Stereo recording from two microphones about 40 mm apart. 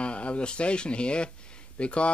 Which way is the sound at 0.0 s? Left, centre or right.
Left.